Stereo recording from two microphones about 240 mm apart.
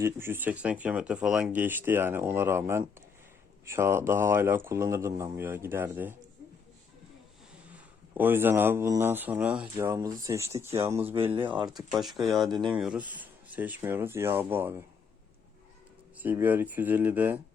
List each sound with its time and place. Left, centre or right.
0.0 s speech: centre
7.7 s speech: centre
11.9 s speech: centre
16.2 s speech: centre